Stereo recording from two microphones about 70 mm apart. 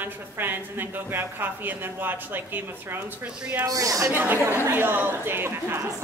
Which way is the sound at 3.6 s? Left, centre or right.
Right.